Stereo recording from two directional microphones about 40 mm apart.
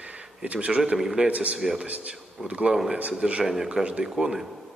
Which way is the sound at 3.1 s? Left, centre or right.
Right.